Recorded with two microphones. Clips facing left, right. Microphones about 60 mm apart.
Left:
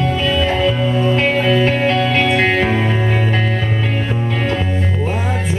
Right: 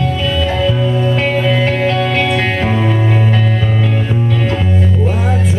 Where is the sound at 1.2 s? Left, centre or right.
Centre.